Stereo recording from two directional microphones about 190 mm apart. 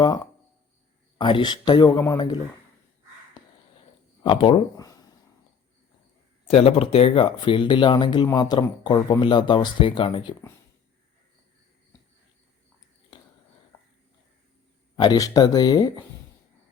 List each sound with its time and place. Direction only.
1.2 s speech: 25° left (ahead or behind)
4.2 s speech: 25° left (ahead or behind)
6.5 s speech: 30° left (ahead or behind)
13.7 s a sound: 10° left (ahead or behind)
14.9 s speech: 20° left (ahead or behind)